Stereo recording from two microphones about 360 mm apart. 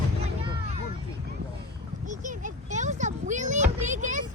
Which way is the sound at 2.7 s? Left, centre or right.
Centre.